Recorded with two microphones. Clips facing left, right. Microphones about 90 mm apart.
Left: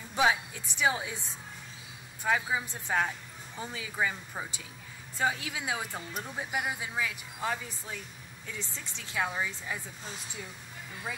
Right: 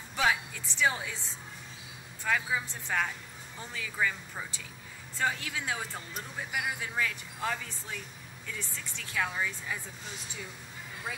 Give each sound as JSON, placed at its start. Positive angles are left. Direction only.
{"t": 0.1, "sound": "speech", "side_deg": 20}
{"t": 2.2, "sound": "speech", "side_deg": 20}